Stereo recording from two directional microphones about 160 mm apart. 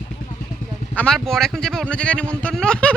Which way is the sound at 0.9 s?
5° left (ahead or behind).